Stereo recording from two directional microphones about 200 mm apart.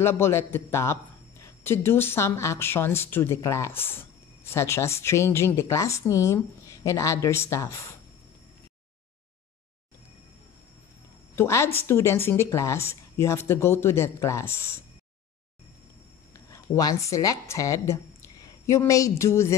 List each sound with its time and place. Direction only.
0.0 s speech: 10° left (ahead or behind)
11.3 s speech: 15° left (ahead or behind)
16.3 s a sound: 15° left (ahead or behind)
16.7 s a woman's voice: 15° left (ahead or behind)